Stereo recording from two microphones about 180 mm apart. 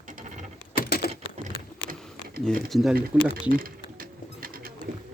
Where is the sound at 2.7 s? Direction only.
Centre (ahead or behind).